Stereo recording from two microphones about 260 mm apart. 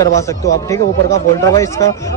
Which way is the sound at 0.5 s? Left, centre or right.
Centre.